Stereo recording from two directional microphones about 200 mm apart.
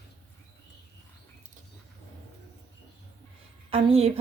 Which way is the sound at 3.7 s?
30° right (ahead or behind).